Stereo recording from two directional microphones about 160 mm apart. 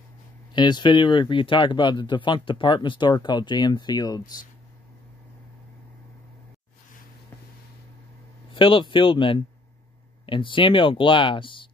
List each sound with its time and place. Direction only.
0.5 s speech: 25° left (ahead or behind)
8.5 s speech: 30° left (ahead or behind)